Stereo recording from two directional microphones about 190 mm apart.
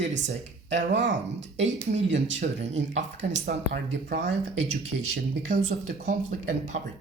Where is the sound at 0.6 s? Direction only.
70° right (ahead or behind).